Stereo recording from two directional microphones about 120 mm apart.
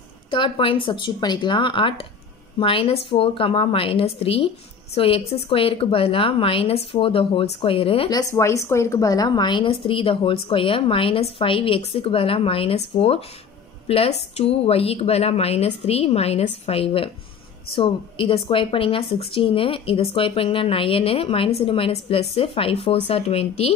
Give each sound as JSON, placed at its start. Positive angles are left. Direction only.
{"t": 0.3, "sound": "a woman's voice", "side_deg": 45}
{"t": 8.1, "sound": "a woman's voice", "side_deg": 30}